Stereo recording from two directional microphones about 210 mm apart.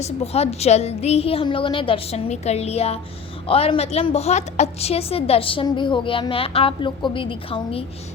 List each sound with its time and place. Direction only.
0.0 s a woman's voice: 30° left (ahead or behind)